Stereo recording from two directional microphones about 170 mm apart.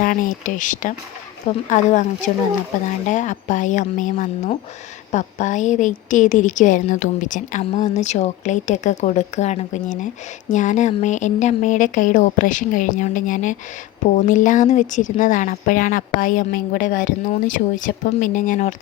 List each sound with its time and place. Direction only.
0.0 s speech: 55° left (ahead or behind)
7.6 s speech: 40° left (ahead or behind)